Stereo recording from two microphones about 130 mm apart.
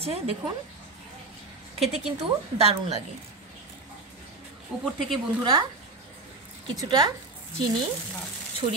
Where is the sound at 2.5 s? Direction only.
50° right (ahead or behind).